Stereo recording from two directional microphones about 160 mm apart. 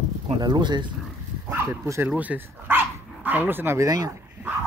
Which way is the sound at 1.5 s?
15° right (ahead or behind).